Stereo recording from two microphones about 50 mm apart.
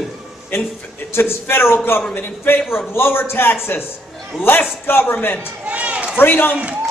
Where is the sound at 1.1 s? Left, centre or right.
Left.